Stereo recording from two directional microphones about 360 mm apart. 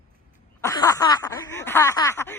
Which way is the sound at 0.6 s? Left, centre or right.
Centre.